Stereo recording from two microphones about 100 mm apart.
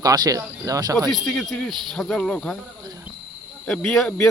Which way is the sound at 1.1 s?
5° left (ahead or behind).